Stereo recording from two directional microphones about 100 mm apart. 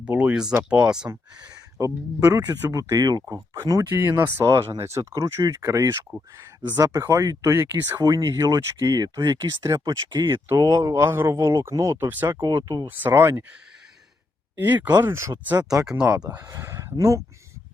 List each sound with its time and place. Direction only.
0.0 s speech: 10° right (ahead or behind)
1.8 s speech: 35° right (ahead or behind)
3.5 s speech: 30° right (ahead or behind)
7.9 s speech: 40° right (ahead or behind)
10.3 s speech: 30° right (ahead or behind)
12.0 s speech: 20° right (ahead or behind)
12.6 s speech: 40° right (ahead or behind)
12.9 s speech: 20° right (ahead or behind)
14.6 s speech: 20° right (ahead or behind); by 15.9 s 35° right (ahead or behind)
15.9 s speech: 10° right (ahead or behind)
16.3 s speech: 25° right (ahead or behind)